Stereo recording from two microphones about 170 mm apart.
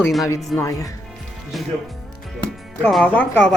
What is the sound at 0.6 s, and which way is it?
Speech, 20° left (ahead or behind).